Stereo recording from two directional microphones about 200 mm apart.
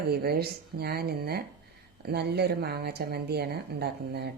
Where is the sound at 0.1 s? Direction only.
50° right (ahead or behind).